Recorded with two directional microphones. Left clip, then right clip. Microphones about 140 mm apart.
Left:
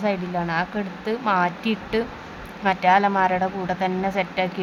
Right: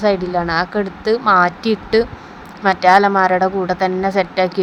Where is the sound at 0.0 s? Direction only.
40° right (ahead or behind).